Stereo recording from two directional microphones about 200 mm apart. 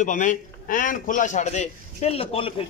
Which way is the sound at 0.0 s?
40° left (ahead or behind).